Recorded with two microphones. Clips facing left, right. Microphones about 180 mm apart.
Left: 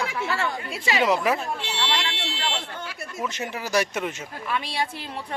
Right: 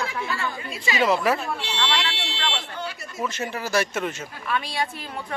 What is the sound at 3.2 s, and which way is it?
Speech, 15° left (ahead or behind).